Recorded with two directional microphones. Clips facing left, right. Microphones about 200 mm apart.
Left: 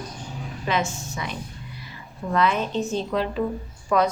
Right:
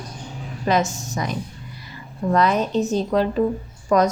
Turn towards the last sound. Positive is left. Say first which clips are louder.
# right 4 dB
turn(degrees=-40)  # may be behind; listen again after turning